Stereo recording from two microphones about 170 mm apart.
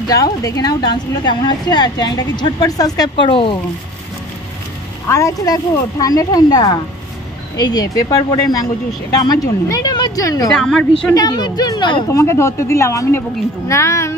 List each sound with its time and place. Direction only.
0.1 s a woman's voice: 20° left (ahead or behind)
5.0 s a woman's voice: 15° left (ahead or behind)
10.5 s a woman's voice: 5° left (ahead or behind)
11.1 s a woman's voice: 25° left (ahead or behind)